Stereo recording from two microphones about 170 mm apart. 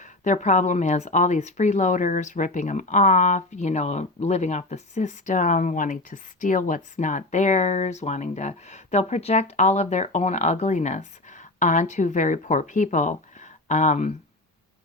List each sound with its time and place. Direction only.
0.0 s speech: 45° left (ahead or behind)